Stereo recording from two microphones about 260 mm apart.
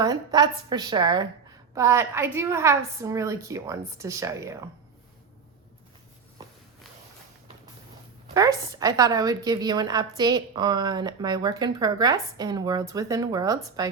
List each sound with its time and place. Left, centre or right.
0.0 s a woman's voice: centre
8.3 s a woman's voice: centre